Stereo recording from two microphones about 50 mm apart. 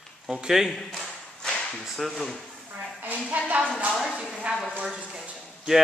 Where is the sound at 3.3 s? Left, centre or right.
Right.